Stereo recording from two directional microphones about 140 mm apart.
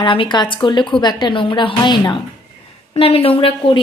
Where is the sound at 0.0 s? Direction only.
35° left (ahead or behind).